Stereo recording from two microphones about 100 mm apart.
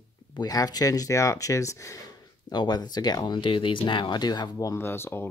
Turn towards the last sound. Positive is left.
turn(degrees=25)  # may be behind; listen again after turning